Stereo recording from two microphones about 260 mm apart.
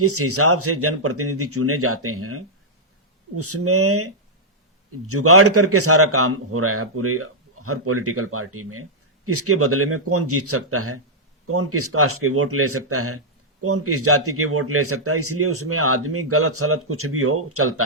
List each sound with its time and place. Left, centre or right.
0.0 s a man's voice: right